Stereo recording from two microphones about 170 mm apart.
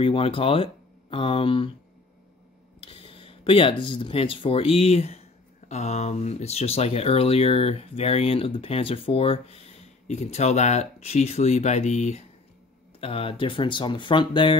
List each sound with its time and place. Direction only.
0.0 s speech: 30° left (ahead or behind)
2.8 s speech: 35° left (ahead or behind)